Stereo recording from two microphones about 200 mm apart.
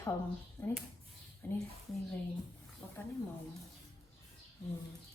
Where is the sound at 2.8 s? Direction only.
10° left (ahead or behind).